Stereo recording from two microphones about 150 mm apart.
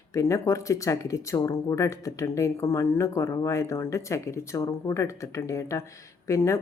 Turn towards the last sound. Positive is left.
turn(degrees=20)  # may be behind; listen again after turning